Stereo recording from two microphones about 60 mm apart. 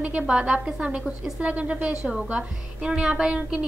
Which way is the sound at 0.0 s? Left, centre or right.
Right.